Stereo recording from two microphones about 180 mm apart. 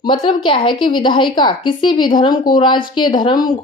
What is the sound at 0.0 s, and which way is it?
Speech, 25° left (ahead or behind).